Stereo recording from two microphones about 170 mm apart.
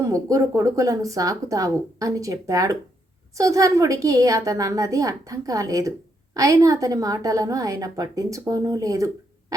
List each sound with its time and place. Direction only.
0.0 s a woman's voice: 20° right (ahead or behind)